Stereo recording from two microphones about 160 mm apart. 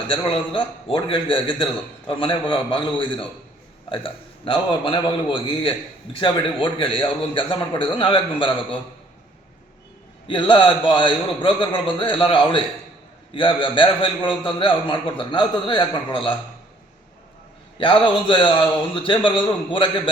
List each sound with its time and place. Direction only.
0.1 s a man's voice: 35° left (ahead or behind)
10.2 s a man's voice: 30° left (ahead or behind)
17.7 s a man's voice: 30° left (ahead or behind)